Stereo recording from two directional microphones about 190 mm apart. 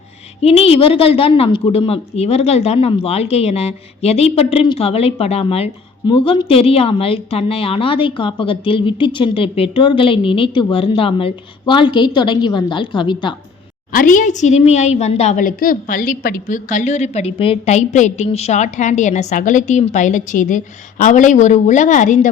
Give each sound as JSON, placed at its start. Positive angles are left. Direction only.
{"t": 0.4, "sound": "a woman's voice", "side_deg": 30}
{"t": 13.9, "sound": "a woman's voice", "side_deg": 45}